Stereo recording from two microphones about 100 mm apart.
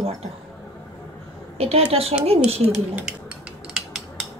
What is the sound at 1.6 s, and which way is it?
A woman's voice, 80° right.